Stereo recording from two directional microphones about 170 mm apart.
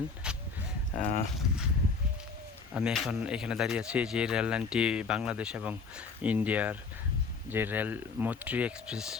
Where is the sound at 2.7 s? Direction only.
5° right (ahead or behind).